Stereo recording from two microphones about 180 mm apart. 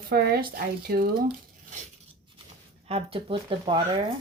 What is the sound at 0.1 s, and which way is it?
Speech, 60° right (ahead or behind).